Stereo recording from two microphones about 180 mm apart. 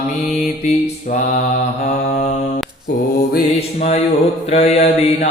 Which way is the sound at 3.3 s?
40° left (ahead or behind).